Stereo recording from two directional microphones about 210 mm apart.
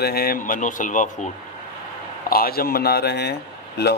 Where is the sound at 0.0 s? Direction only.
45° left (ahead or behind).